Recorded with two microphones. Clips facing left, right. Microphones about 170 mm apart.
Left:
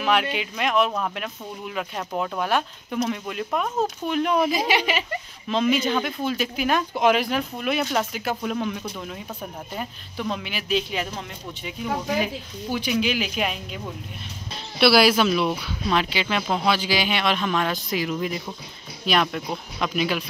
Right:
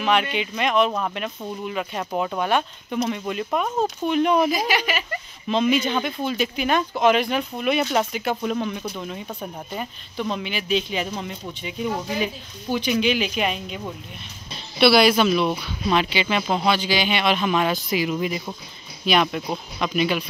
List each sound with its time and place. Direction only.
0.0 s speech: 5° left (ahead or behind)
4.5 s speech: 25° left (ahead or behind)
5.5 s speech: centre (ahead or behind)
12.9 s speech: 5° left (ahead or behind)
14.8 s speech: 5° left (ahead or behind)